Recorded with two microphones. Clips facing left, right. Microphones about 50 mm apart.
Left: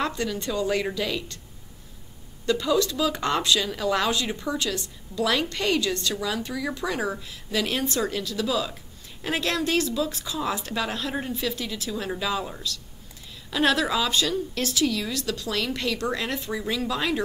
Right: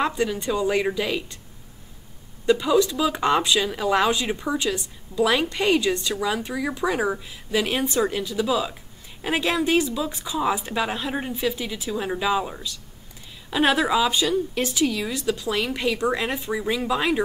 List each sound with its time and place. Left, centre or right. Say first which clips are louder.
0.0 s speech: right 4 dB; centre
2.4 s speech: right 4 dB; centre